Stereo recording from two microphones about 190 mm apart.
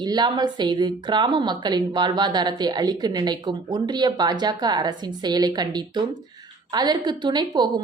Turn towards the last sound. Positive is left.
turn(degrees=-20)  # may be behind; listen again after turning